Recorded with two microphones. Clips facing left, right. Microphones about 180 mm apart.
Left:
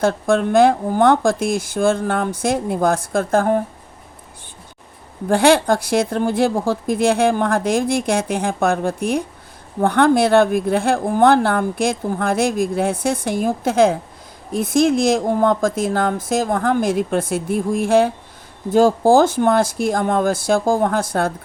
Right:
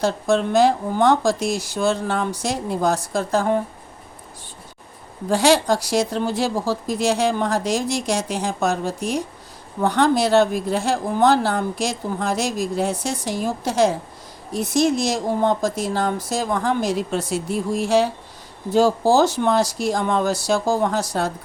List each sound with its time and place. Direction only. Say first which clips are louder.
0.0 s speech: left 3 dB; 55° left (ahead or behind)
5.3 s speech: left 3 dB; 55° left (ahead or behind)